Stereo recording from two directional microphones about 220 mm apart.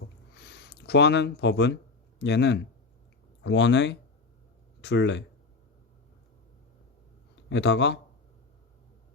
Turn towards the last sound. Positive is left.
turn(degrees=50)  # may be behind; listen again after turning